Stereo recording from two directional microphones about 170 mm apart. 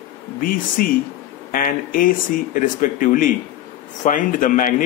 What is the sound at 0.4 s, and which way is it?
Speech, 55° left (ahead or behind).